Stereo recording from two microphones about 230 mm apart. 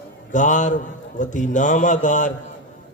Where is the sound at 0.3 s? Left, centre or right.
Left.